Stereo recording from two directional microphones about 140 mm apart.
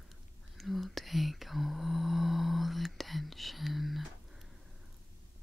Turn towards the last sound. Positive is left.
turn(degrees=0)  # may be behind; listen again after turning